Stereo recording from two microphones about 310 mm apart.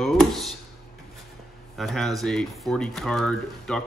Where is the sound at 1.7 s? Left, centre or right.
Centre.